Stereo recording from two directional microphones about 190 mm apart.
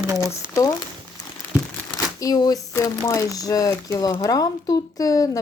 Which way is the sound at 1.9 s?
20° left (ahead or behind).